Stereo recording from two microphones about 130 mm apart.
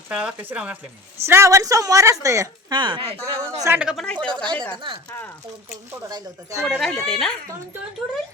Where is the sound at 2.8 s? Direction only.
40° right (ahead or behind).